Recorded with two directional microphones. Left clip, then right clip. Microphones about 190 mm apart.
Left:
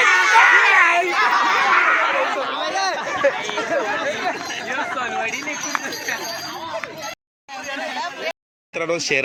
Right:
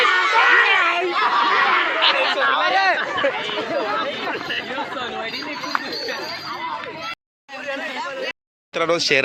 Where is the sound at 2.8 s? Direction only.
30° right (ahead or behind).